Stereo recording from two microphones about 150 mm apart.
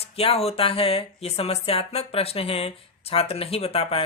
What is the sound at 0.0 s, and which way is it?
Speech, 40° left (ahead or behind).